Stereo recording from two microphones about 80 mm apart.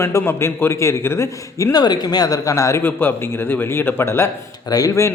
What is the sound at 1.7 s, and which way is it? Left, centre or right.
Speech, left.